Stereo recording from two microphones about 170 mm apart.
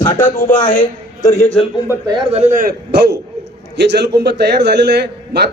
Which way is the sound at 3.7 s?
90° right.